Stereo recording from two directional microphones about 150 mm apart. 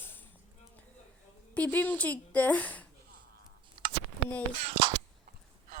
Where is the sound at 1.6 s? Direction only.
10° left (ahead or behind).